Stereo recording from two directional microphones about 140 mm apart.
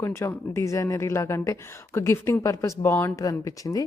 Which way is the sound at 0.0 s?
20° left (ahead or behind).